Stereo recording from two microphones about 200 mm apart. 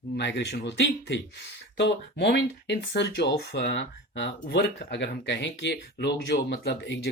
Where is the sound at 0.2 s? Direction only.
60° left (ahead or behind).